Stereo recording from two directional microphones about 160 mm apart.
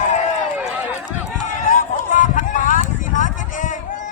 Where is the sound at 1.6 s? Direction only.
55° left (ahead or behind).